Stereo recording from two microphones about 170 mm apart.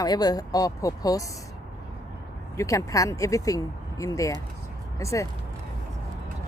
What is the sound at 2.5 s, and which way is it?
Speech, 20° left (ahead or behind).